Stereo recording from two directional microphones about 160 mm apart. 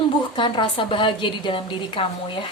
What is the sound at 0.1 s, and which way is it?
A woman's voice, 30° left (ahead or behind).